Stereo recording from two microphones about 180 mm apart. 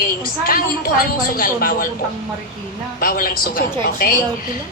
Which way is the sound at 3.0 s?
50° left (ahead or behind).